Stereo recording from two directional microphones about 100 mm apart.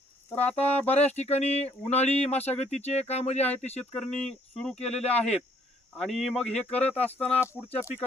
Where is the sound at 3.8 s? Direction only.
15° left (ahead or behind).